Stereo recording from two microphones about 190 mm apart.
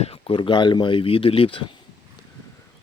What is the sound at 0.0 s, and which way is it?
Speech, 30° left (ahead or behind).